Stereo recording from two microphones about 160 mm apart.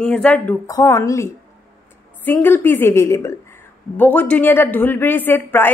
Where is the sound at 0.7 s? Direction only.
20° left (ahead or behind).